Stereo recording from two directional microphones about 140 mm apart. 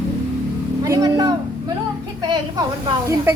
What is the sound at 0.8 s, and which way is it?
Speech, 25° right (ahead or behind).